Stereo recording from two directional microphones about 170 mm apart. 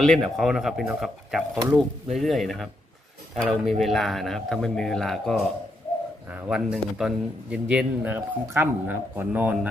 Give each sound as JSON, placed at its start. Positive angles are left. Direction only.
{"t": 0.0, "sound": "a man's voice", "side_deg": 0}